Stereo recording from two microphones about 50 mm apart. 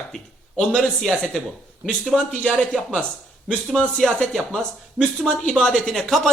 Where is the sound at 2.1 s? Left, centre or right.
Centre.